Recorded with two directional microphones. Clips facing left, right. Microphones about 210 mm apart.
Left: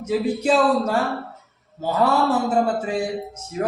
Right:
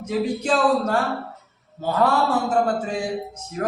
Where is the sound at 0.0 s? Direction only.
10° left (ahead or behind).